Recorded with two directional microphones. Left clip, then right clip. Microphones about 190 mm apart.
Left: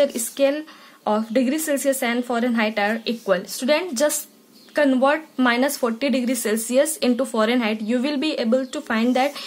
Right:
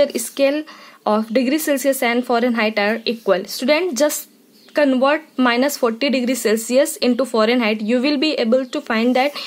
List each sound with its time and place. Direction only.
0.0 s speech: 45° right (ahead or behind)